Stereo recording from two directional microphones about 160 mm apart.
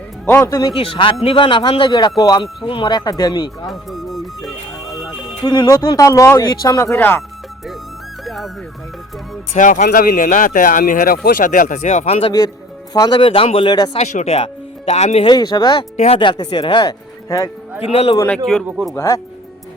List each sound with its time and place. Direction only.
0.3 s speech: 15° left (ahead or behind)
0.8 s speech: 35° left (ahead or behind)
3.7 s music: centre (ahead or behind)
5.5 s speech: 25° left (ahead or behind)
8.2 s music: centre (ahead or behind)
9.6 s speech: 55° left (ahead or behind)
9.8 s a man's voice: 65° left (ahead or behind); by 12.3 s 40° left (ahead or behind)
12.9 s speech: 25° left (ahead or behind)
14.0 s speech: 45° left (ahead or behind)
15.3 s speech: 25° left (ahead or behind)
16.0 s speech: 40° left (ahead or behind); by 17.5 s 20° left (ahead or behind)
17.8 s speech: 40° left (ahead or behind)
18.9 s speech: 20° left (ahead or behind)